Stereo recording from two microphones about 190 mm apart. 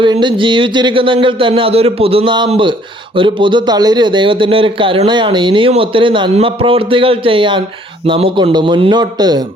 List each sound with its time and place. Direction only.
0.0 s a man's voice: 25° right (ahead or behind)